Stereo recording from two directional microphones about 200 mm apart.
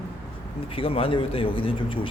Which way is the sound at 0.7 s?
25° left (ahead or behind).